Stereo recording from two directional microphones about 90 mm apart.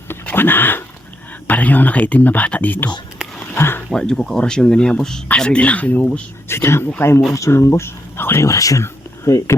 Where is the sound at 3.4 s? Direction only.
25° left (ahead or behind).